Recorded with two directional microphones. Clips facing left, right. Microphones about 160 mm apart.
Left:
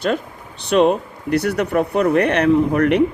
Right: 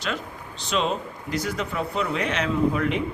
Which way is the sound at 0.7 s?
60° left (ahead or behind).